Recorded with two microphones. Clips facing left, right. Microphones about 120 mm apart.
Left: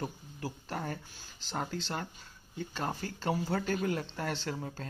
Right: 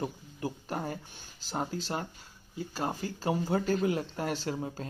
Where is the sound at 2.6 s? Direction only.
10° right (ahead or behind).